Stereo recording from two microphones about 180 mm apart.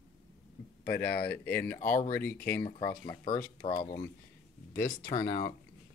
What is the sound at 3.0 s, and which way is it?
Speech, 25° left (ahead or behind).